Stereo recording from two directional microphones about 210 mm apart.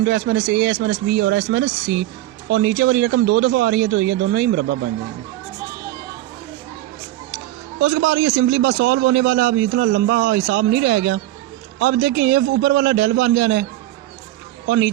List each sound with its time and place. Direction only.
0.0 s a man's voice: 50° right (ahead or behind)
7.8 s a man's voice: 60° right (ahead or behind)
14.7 s a man's voice: 50° right (ahead or behind)